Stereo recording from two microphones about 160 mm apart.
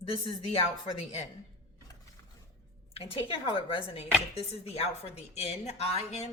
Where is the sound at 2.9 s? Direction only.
35° left (ahead or behind).